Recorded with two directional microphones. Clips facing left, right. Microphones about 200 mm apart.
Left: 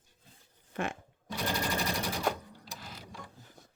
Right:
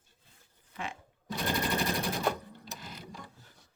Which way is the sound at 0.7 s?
50° left (ahead or behind).